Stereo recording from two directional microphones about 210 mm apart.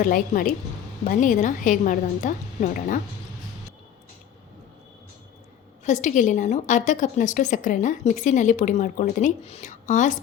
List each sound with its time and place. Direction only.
0.0 s a woman's voice: 40° left (ahead or behind)
5.8 s a woman's voice: 35° left (ahead or behind)